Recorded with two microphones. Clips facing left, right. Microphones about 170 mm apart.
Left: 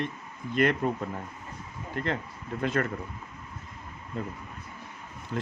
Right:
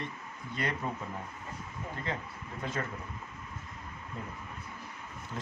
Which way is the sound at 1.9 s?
70° left (ahead or behind).